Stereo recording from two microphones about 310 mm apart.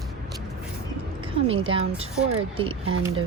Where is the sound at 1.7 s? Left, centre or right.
Centre.